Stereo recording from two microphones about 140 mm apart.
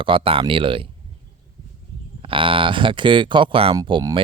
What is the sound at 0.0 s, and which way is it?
Speech, 40° right (ahead or behind).